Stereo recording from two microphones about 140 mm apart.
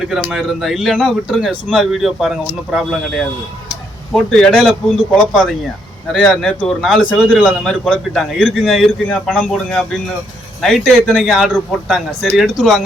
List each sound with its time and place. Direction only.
0.1 s a man's voice: centre (ahead or behind)